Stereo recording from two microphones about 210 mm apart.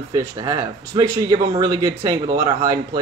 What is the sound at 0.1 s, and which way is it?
Speech, 15° right (ahead or behind).